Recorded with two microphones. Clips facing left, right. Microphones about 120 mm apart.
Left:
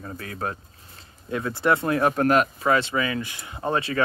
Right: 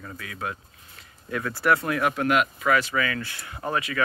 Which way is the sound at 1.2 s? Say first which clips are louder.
Left 1 dB; 25° left (ahead or behind).